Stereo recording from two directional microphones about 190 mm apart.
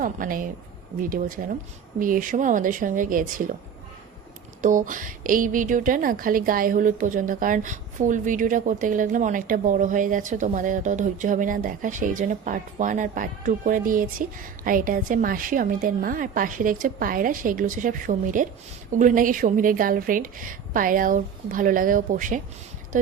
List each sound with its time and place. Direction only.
0.0 s a woman's voice: 45° right (ahead or behind)
4.6 s a woman's voice: 45° right (ahead or behind)